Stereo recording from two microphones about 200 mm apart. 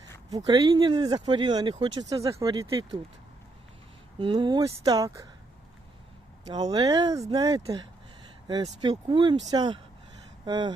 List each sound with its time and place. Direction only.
0.3 s speech: 20° right (ahead or behind)
4.2 s speech: 25° right (ahead or behind)
6.5 s speech: 20° right (ahead or behind)